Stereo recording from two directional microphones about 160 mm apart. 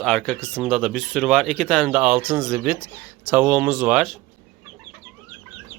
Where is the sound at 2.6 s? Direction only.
Centre (ahead or behind).